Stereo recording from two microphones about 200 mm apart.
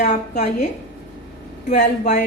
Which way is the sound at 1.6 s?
35° left (ahead or behind).